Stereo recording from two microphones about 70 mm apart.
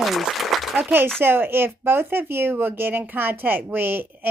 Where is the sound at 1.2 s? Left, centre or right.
Right.